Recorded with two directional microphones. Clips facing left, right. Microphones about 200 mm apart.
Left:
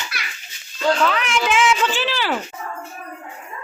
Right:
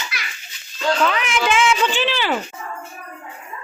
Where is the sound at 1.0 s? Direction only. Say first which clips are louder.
Even; centre (ahead or behind).